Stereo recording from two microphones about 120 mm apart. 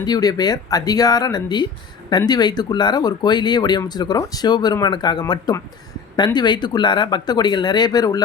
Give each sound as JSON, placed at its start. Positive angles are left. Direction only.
{"t": 0.0, "sound": "speech", "side_deg": 30}